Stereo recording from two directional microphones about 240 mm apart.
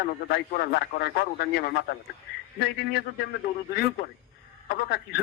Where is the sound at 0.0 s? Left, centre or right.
Left.